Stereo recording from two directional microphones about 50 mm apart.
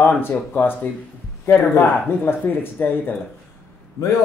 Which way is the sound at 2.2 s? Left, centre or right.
Left.